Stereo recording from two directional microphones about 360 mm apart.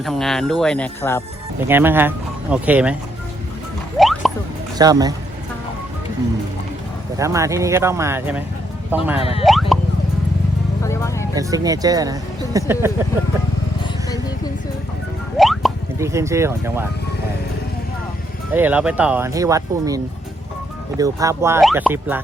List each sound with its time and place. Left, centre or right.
0.0 s speech: centre
1.6 s speech: centre
3.9 s a sound: centre
4.8 s speech: centre
7.2 s speech: centre
9.1 s speech: centre
9.4 s a sound: centre
10.8 s music: centre
11.3 s speech: centre
15.4 s a sound: centre
18.5 s speech: centre
21.0 s speech: centre